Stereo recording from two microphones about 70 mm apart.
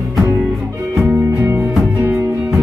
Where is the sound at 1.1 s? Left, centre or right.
Right.